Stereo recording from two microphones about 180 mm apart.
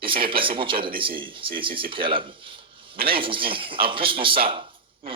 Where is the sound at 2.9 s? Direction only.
55° right (ahead or behind).